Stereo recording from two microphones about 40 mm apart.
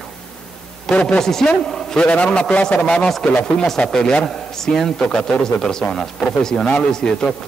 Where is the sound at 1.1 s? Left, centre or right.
Centre.